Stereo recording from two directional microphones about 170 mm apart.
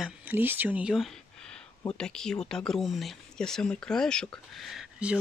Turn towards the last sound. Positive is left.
turn(degrees=0)  # may be behind; listen again after turning